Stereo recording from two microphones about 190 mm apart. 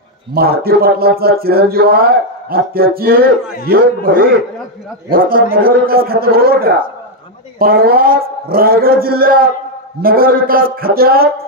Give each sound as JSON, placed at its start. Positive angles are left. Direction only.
{"t": 0.3, "sound": "speech", "side_deg": -55}